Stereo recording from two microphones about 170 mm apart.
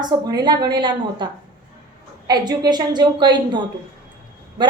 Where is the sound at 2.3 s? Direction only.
25° right (ahead or behind).